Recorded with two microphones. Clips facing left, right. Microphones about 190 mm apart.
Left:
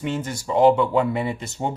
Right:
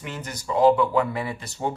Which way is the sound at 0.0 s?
25° left (ahead or behind).